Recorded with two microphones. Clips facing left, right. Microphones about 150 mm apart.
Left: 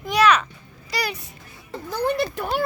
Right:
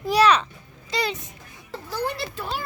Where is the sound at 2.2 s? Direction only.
55° left (ahead or behind).